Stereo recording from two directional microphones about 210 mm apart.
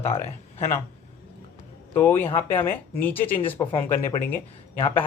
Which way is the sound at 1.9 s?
10° left (ahead or behind).